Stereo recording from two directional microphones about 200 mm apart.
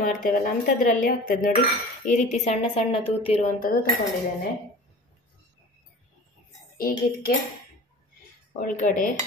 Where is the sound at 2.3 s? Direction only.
30° left (ahead or behind).